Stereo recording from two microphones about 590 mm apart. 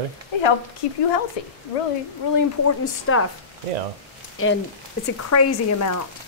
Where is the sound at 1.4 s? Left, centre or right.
Left.